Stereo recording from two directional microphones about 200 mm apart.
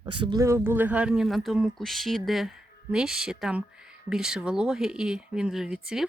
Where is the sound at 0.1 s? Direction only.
25° right (ahead or behind).